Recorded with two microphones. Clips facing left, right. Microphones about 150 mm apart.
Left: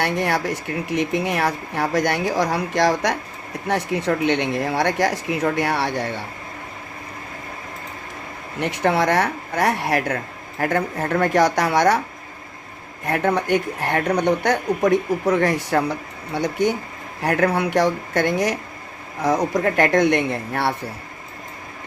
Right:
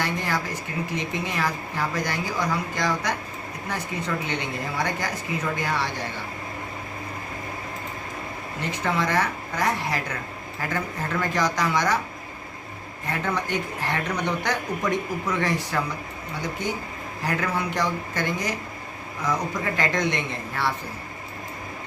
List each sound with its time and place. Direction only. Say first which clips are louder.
0.0 s a woman's voice: left 6 dB; 70° left (ahead or behind)
8.6 s a woman's voice: left 7 dB; 70° left (ahead or behind)
13.1 s speech: left 8 dB; 60° left (ahead or behind)
17.2 s speech: left 7 dB; 60° left (ahead or behind)
19.6 s speech: left 9 dB; 60° left (ahead or behind)